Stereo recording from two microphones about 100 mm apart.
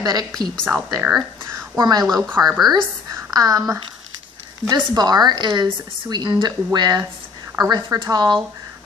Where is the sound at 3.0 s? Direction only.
35° right (ahead or behind).